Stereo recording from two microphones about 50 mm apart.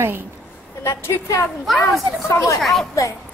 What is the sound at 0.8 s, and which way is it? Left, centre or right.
Speech, left.